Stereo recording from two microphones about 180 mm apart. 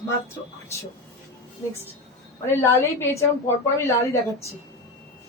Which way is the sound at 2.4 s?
15° left (ahead or behind).